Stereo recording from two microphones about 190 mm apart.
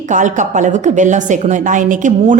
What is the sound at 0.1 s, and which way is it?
A woman's voice, 40° right (ahead or behind).